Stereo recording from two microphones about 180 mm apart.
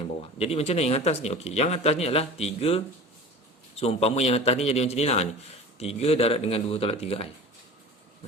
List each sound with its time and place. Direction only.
0.3 s speech: 35° left (ahead or behind)